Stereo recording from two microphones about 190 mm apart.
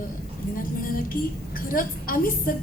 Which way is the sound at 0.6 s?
50° left (ahead or behind).